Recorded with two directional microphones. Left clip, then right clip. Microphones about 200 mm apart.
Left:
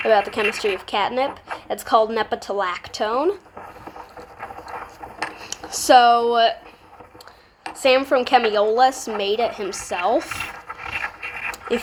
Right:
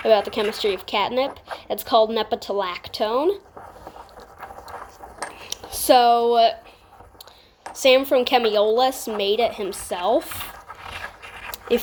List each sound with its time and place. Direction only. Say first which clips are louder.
0.0 s speech: left 1 dB; 15° right (ahead or behind)
5.2 s cutlery: left 3 dB; 15° right (ahead or behind)
7.8 s speech: right 1 dB; 15° right (ahead or behind)